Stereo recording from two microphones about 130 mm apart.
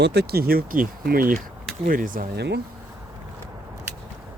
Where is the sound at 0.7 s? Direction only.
90° right.